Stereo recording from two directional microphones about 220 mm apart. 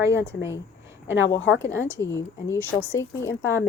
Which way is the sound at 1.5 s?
55° left (ahead or behind).